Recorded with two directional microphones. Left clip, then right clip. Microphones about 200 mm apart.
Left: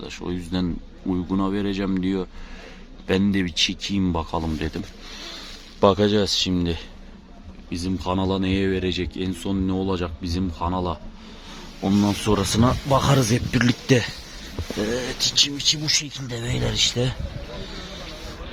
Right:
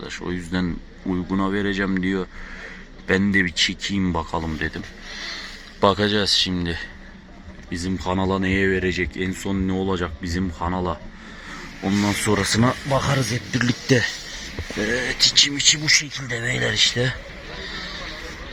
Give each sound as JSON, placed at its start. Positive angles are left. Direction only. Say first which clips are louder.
{"t": 0.0, "sound": "a man's voice", "louder": "right 2 dB", "side_deg": 5}
{"t": 4.5, "sound": "a man's voice", "louder": "right 2 dB", "side_deg": 25}
{"t": 5.8, "sound": "a man's voice", "louder": "even", "side_deg": 15}
{"t": 7.7, "sound": "speech", "louder": "right 1 dB", "side_deg": 0}
{"t": 11.9, "sound": "a man's voice", "louder": "right 1 dB", "side_deg": 10}
{"t": 12.9, "sound": "speech", "louder": "left 2 dB", "side_deg": 30}
{"t": 13.6, "sound": "a man's voice", "louder": "right 1 dB", "side_deg": 20}